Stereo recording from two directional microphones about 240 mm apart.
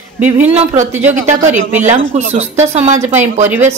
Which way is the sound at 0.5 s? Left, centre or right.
Right.